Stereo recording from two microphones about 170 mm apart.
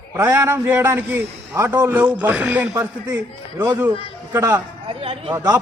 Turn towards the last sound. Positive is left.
turn(degrees=-35)  # may be behind; listen again after turning